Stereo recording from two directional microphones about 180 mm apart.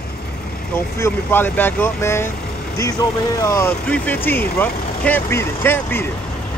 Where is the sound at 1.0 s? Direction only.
10° left (ahead or behind).